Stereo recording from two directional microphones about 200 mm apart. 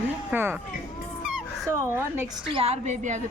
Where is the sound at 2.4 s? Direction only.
25° right (ahead or behind).